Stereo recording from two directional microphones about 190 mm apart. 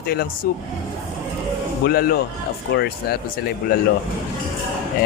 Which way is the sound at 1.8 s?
50° left (ahead or behind).